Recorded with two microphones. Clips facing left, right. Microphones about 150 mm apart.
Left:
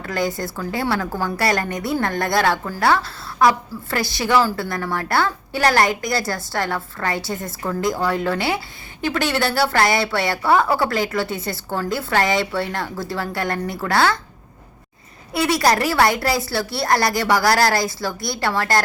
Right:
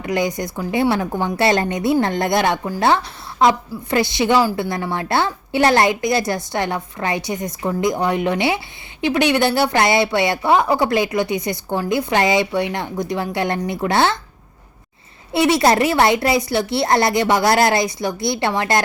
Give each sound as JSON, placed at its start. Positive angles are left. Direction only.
{"t": 0.0, "sound": "a woman's voice", "side_deg": -20}
{"t": 15.3, "sound": "a woman's voice", "side_deg": -25}